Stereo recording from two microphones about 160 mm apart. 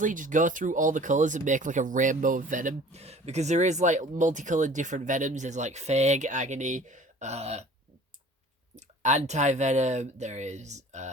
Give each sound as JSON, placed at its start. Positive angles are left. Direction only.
{"t": 0.0, "sound": "speech", "side_deg": -55}
{"t": 8.7, "sound": "speech", "side_deg": -45}